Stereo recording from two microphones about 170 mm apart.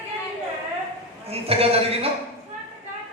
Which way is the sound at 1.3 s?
35° right (ahead or behind).